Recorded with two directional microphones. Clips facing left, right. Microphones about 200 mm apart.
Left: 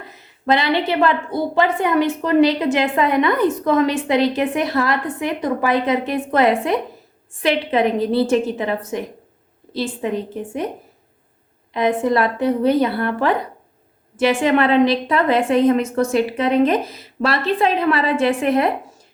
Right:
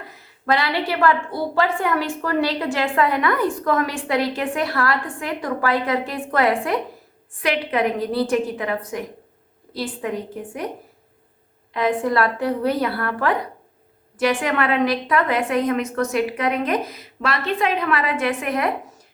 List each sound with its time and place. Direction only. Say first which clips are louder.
0.1 s a woman's voice: left 3 dB; 20° left (ahead or behind)
11.7 s a woman's voice: left 3 dB; 20° left (ahead or behind)